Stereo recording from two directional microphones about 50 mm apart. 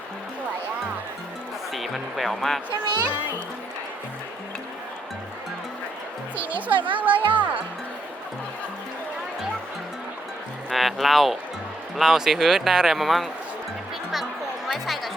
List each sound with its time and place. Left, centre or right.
1.7 s speech: centre
6.3 s speech: right
10.7 s speech: centre
14.7 s music: centre